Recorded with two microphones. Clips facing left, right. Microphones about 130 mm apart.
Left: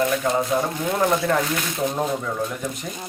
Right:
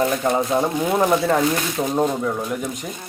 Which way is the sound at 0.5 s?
25° right (ahead or behind).